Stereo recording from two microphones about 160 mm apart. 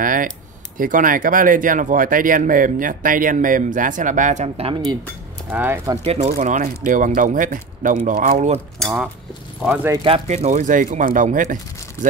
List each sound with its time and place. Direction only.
0.0 s a sound: 60° right (ahead or behind)
0.7 s speech: 60° right (ahead or behind)
5.5 s speech: 15° right (ahead or behind)
6.0 s speech: 45° right (ahead or behind)
6.3 s speech: 60° right (ahead or behind)
8.7 s speech: 5° right (ahead or behind)
10.0 s speech: 40° right (ahead or behind)